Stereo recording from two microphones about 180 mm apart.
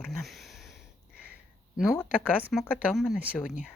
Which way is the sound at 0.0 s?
Centre (ahead or behind).